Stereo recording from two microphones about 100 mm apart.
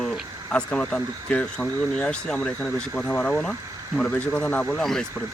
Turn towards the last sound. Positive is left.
turn(degrees=5)  # may be behind; listen again after turning